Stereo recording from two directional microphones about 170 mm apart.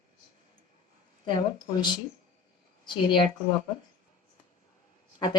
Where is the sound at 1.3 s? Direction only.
25° left (ahead or behind).